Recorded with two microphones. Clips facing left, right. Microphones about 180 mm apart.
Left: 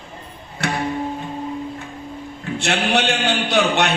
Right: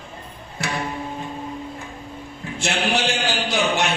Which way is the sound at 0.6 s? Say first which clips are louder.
Left 4 dB; 60° left (ahead or behind).